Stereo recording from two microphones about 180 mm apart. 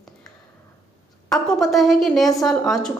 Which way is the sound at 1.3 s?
Centre (ahead or behind).